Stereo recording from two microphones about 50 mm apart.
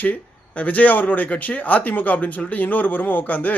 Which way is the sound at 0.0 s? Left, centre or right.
Left.